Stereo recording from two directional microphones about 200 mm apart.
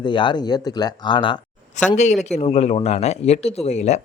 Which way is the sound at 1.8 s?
35° left (ahead or behind).